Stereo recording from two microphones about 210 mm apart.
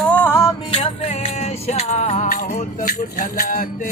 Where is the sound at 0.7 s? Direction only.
30° left (ahead or behind).